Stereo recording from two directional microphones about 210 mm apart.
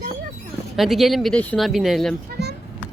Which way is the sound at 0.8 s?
Centre (ahead or behind).